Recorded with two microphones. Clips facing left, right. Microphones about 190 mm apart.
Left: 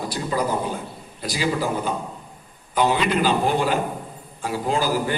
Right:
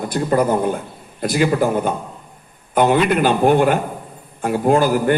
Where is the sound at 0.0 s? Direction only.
55° right (ahead or behind).